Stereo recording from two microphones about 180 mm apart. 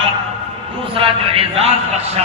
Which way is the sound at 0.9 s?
30° right (ahead or behind).